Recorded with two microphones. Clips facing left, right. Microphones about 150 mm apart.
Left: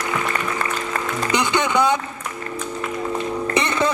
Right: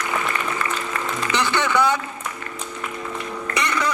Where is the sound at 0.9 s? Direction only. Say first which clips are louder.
Left 3 dB; 35° left (ahead or behind).